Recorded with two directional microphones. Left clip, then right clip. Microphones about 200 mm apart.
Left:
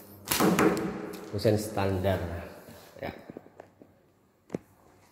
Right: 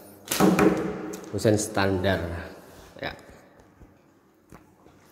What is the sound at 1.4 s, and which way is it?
Speech, 15° right (ahead or behind).